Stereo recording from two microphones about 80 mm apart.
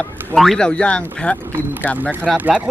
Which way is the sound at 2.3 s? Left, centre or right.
Centre.